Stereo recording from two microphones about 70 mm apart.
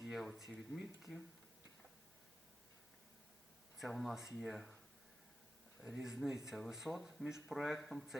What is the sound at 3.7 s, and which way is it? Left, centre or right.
Speech, centre.